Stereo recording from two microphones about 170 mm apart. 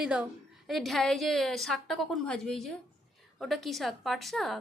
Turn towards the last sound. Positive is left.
turn(degrees=0)  # may be behind; listen again after turning